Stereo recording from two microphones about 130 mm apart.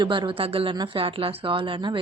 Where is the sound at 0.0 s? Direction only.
40° right (ahead or behind).